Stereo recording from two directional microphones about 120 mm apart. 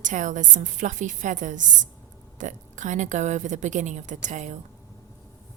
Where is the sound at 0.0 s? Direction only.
90° right.